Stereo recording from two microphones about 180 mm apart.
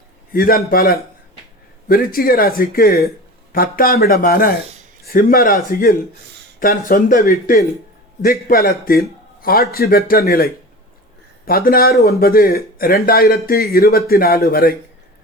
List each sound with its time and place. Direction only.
0.3 s a man's voice: 55° left (ahead or behind)